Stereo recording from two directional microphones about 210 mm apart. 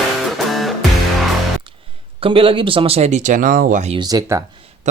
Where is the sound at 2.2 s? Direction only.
25° right (ahead or behind).